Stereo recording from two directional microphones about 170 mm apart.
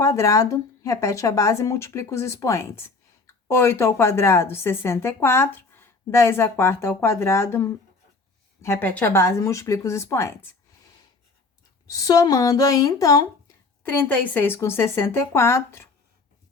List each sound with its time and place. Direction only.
0.0 s speech: 20° left (ahead or behind)
11.9 s speech: 20° left (ahead or behind)